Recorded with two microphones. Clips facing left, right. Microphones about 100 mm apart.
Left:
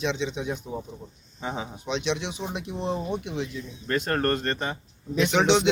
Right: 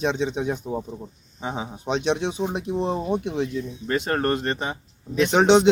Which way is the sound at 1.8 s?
45° right (ahead or behind).